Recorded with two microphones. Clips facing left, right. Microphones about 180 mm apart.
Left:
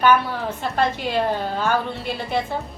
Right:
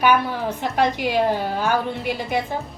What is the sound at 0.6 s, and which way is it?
A woman's voice, 15° right (ahead or behind).